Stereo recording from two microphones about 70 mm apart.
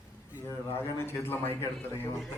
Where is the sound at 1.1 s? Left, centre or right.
Left.